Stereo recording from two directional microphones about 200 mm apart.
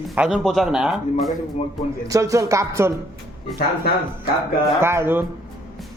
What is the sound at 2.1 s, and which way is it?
Speech, 15° right (ahead or behind).